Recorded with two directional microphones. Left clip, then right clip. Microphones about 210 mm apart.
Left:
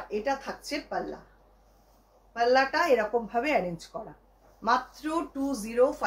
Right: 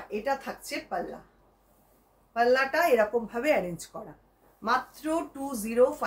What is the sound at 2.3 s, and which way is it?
Speech, 15° right (ahead or behind).